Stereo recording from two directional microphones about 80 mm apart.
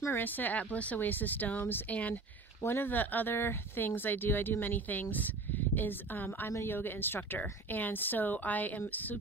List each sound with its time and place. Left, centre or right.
0.0 s speech: left